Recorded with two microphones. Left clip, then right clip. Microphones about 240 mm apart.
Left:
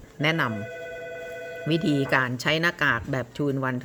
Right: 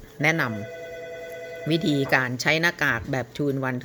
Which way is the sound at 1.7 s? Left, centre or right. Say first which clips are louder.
Right 1 dB; centre.